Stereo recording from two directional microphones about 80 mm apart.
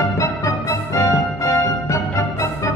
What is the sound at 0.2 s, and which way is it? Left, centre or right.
Music, left.